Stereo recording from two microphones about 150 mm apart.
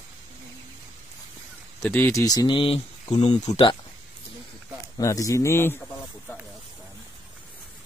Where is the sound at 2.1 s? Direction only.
25° left (ahead or behind); by 3.7 s 45° left (ahead or behind).